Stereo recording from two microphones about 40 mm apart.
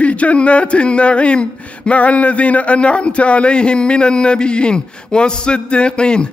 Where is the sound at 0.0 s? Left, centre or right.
Left.